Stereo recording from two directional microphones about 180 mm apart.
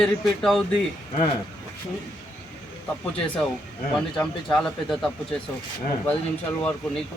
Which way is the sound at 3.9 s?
5° left (ahead or behind).